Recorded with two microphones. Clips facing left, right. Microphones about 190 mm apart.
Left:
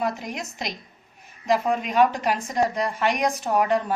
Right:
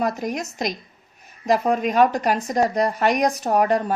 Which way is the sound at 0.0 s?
40° right (ahead or behind).